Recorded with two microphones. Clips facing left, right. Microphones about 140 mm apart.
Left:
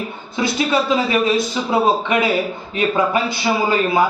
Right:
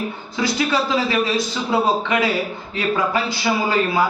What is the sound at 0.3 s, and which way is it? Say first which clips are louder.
Speech: left 2 dB; 25° left (ahead or behind).